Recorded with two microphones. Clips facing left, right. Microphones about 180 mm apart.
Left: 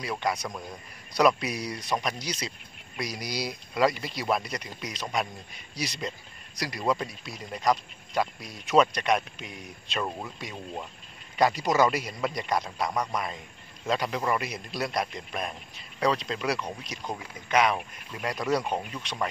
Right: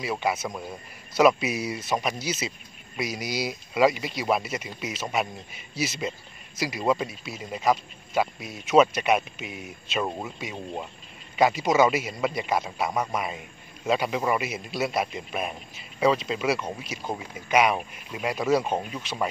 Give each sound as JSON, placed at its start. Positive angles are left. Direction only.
{"t": 0.0, "sound": "speech", "side_deg": -5}
{"t": 11.3, "sound": "speech", "side_deg": 0}
{"t": 18.6, "sound": "speech", "side_deg": -25}
{"t": 18.9, "sound": "speech", "side_deg": -5}